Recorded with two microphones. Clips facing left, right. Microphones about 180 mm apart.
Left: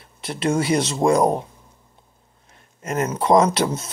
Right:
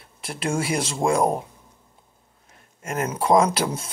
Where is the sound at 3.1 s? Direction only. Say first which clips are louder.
Left 2 dB; 5° right (ahead or behind).